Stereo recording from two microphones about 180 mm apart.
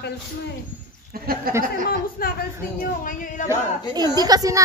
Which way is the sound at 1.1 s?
55° right (ahead or behind).